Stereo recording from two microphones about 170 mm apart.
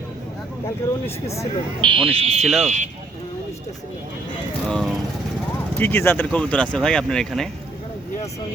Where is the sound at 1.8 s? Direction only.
30° right (ahead or behind).